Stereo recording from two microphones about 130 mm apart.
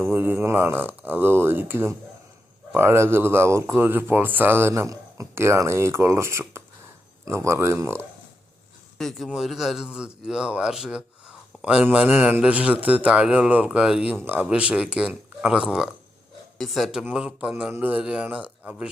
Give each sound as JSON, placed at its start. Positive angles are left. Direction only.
{"t": 0.1, "sound": "speech", "side_deg": -15}
{"t": 9.0, "sound": "a man's voice", "side_deg": 0}